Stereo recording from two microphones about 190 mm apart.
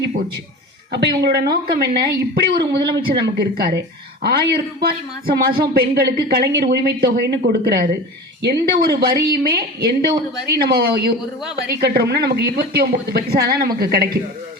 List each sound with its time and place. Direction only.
1.2 s speech: 55° right (ahead or behind)